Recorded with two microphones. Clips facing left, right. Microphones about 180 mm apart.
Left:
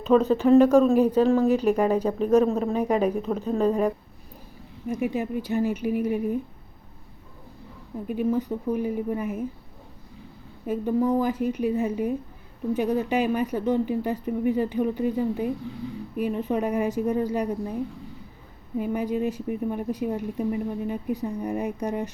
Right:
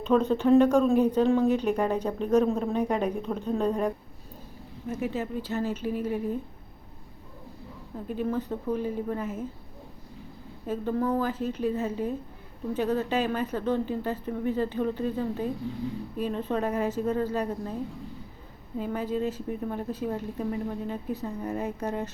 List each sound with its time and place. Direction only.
0.0 s speech: 5° left (ahead or behind)
8.0 s speech: 10° left (ahead or behind)
10.7 s speech: 15° left (ahead or behind)
18.8 s speech: 15° left (ahead or behind)